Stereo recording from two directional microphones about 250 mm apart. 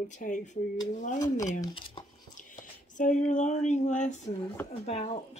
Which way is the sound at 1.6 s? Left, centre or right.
Centre.